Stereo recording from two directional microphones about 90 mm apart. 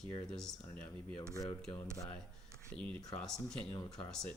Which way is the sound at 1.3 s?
40° left (ahead or behind).